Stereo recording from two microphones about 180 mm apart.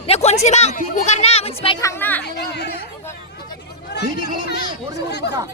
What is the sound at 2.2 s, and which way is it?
Speech, 70° left (ahead or behind).